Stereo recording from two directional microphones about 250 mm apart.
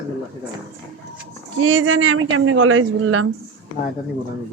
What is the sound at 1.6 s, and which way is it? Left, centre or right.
Speech, right.